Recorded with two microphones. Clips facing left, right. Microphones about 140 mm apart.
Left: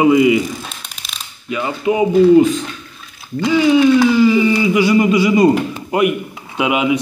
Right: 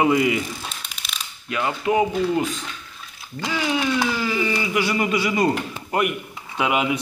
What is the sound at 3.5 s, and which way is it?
Speech, 5° left (ahead or behind).